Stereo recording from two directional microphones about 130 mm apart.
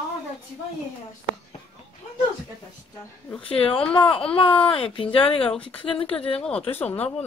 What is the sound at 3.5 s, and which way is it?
Speech, 45° left (ahead or behind).